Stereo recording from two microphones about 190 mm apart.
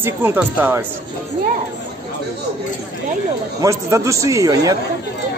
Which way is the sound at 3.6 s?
15° right (ahead or behind).